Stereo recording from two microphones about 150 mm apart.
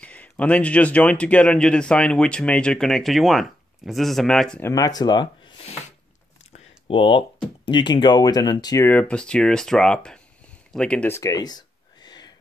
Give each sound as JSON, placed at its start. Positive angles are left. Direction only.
{"t": 0.0, "sound": "speech", "side_deg": 10}
{"t": 4.6, "sound": "speech", "side_deg": 25}
{"t": 6.9, "sound": "speech", "side_deg": 35}
{"t": 8.8, "sound": "speech", "side_deg": 10}
{"t": 10.7, "sound": "a sound", "side_deg": 5}